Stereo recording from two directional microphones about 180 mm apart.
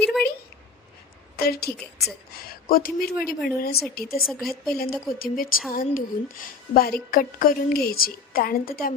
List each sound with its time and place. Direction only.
0.0 s a sound: 5° left (ahead or behind)
1.4 s a woman's voice: 60° left (ahead or behind)
4.3 s speech: centre (ahead or behind)
4.7 s a woman's voice: 55° left (ahead or behind)